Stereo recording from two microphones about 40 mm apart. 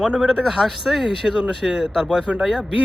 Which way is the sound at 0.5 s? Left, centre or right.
Centre.